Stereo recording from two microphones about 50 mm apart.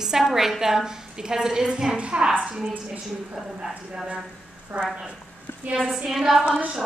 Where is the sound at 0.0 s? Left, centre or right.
Centre.